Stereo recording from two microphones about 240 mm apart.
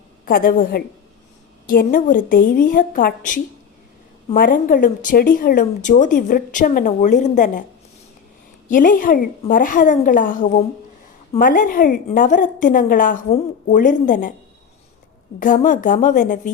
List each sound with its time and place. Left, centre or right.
0.3 s a woman's voice: left
8.7 s a woman's voice: left
15.4 s a woman's voice: left